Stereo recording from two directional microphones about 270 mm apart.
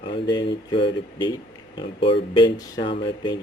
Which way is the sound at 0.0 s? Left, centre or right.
Centre.